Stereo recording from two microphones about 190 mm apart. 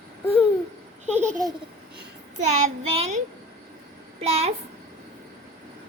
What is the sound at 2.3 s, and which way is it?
Child singing, 40° right (ahead or behind).